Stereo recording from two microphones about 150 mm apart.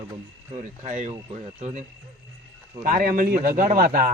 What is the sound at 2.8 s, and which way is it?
Speech, 75° right (ahead or behind).